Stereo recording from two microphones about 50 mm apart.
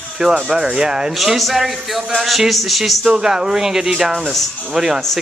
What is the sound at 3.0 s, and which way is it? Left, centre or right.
Speech, centre.